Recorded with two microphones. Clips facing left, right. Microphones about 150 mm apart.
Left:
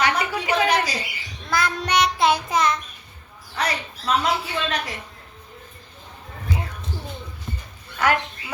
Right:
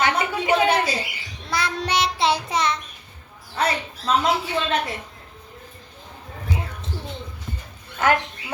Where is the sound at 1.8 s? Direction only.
30° right (ahead or behind).